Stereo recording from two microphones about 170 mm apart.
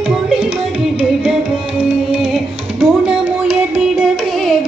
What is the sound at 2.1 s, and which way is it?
Music, 5° right (ahead or behind).